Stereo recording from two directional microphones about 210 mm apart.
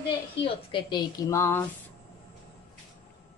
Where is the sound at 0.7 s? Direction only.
20° left (ahead or behind).